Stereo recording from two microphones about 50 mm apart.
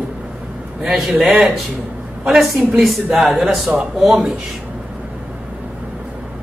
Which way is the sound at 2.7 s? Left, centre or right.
Centre.